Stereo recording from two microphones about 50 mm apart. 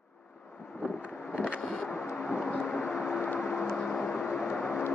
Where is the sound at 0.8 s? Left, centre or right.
Right.